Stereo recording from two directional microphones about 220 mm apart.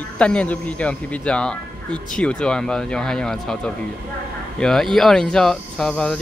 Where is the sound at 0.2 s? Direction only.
5° left (ahead or behind).